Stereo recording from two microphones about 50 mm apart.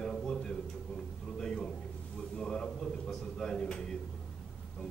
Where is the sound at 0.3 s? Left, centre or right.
Centre.